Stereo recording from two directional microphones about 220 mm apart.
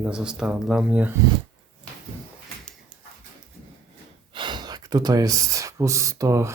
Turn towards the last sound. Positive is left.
turn(degrees=-15)  # may be behind; listen again after turning